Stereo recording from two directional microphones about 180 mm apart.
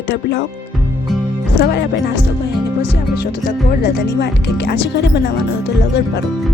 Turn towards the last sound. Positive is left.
turn(degrees=75)  # may be behind; listen again after turning